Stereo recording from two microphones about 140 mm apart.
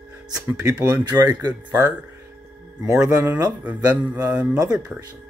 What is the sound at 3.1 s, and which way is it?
Speech, 15° right (ahead or behind).